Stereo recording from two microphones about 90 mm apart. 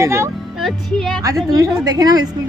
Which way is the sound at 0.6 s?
5° left (ahead or behind).